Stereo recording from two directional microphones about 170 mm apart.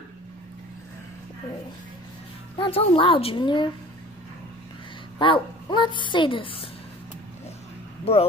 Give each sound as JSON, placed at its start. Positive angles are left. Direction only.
{"t": 2.5, "sound": "a woman's voice", "side_deg": 30}
{"t": 5.2, "sound": "a woman's voice", "side_deg": 30}
{"t": 8.0, "sound": "speech", "side_deg": 35}